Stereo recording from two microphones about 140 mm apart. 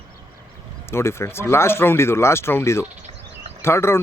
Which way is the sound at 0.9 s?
20° left (ahead or behind).